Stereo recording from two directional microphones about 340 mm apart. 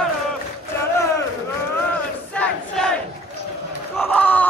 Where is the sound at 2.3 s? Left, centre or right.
Centre.